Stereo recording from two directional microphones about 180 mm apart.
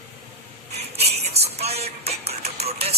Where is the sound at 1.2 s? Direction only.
35° right (ahead or behind).